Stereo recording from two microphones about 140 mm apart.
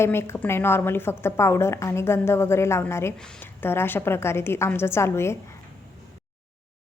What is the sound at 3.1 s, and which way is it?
A woman's voice, 5° left (ahead or behind).